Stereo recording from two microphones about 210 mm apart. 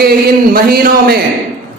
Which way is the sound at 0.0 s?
45° right (ahead or behind).